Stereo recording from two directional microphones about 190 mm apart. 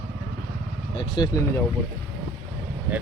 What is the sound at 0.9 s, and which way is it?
Speech, 25° left (ahead or behind).